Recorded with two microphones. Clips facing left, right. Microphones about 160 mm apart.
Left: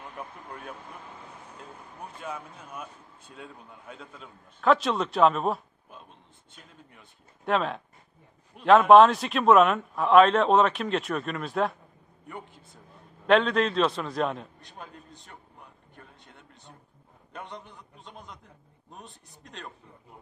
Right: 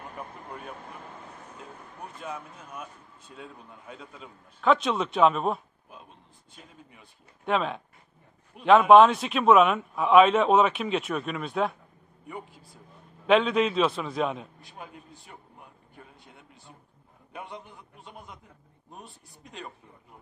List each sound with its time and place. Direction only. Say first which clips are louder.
0.2 s a man's voice: even; centre (ahead or behind)
2.2 s a man's voice: even; centre (ahead or behind)
16.0 s a sound: right 1 dB; 5° right (ahead or behind)
17.3 s a man's voice: even; 5° right (ahead or behind)